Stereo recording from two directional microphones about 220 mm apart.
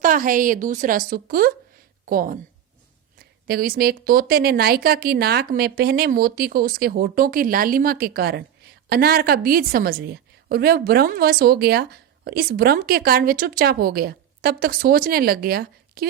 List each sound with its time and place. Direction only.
0.0 s a woman's voice: 35° right (ahead or behind)
3.4 s a woman's voice: 45° right (ahead or behind)